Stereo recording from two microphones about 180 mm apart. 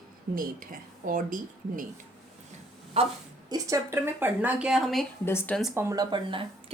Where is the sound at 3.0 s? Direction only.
35° right (ahead or behind).